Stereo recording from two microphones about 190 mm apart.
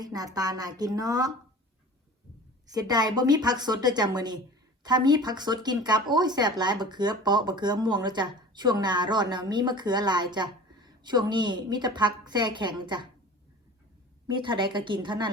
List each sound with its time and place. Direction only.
0.0 s speech: 20° right (ahead or behind)
2.7 s speech: 20° right (ahead or behind)
14.3 s speech: 25° right (ahead or behind)